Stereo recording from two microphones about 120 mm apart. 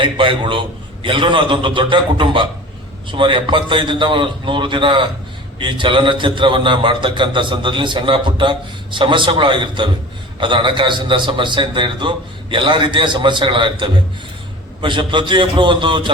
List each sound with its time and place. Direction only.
0.0 s a man's voice: 45° right (ahead or behind)